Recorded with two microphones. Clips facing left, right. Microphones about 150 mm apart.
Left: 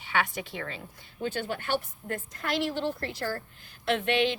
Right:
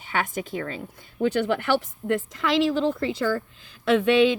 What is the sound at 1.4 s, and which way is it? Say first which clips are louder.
A woman's voice: right 8 dB; 90° right.